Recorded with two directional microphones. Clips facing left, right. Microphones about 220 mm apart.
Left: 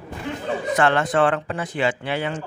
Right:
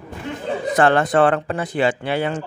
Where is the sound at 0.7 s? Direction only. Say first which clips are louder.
Right 4 dB; 35° right (ahead or behind).